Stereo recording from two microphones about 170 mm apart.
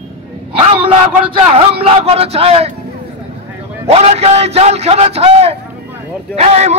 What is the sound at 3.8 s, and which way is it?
A man's voice, 40° right (ahead or behind).